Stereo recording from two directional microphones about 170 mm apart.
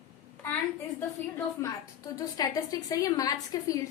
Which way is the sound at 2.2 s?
20° left (ahead or behind).